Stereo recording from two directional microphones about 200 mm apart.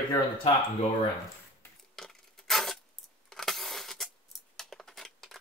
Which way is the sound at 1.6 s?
Centre (ahead or behind).